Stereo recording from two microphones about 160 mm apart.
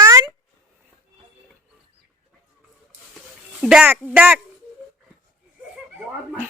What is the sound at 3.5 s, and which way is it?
Speech, 5° right (ahead or behind).